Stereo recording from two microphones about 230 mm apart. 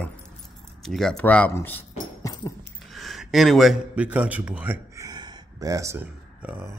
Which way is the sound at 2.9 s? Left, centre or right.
Centre.